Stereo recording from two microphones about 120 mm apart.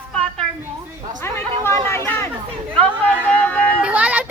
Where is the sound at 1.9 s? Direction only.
20° left (ahead or behind).